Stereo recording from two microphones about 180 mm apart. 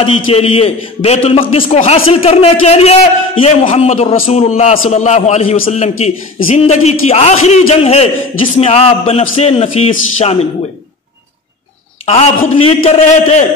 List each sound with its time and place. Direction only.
0.3 s a man's voice: 35° left (ahead or behind)
12.1 s a man's voice: 35° left (ahead or behind)